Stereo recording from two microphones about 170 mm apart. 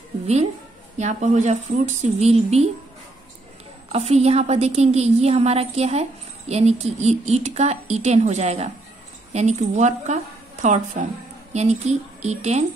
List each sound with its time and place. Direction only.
0.9 s a woman's voice: 45° right (ahead or behind)
3.9 s a woman's voice: 40° right (ahead or behind)